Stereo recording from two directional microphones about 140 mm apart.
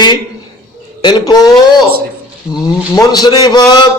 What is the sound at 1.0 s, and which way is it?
A man's voice, 30° left (ahead or behind).